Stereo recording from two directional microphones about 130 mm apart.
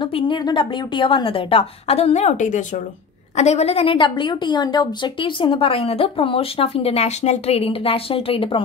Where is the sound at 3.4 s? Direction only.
60° left (ahead or behind).